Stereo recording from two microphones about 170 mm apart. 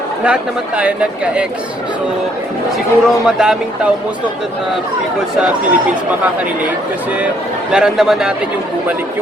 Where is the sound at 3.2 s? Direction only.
5° right (ahead or behind).